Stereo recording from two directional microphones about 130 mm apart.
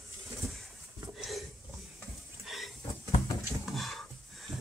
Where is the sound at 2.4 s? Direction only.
Centre (ahead or behind).